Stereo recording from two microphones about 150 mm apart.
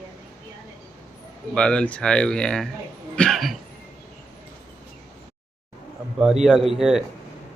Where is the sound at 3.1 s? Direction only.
Centre (ahead or behind).